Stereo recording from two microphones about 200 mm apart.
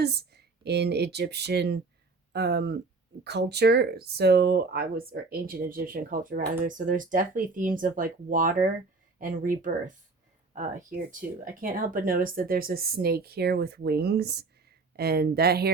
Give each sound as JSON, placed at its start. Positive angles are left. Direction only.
{"t": 0.0, "sound": "speech", "side_deg": -55}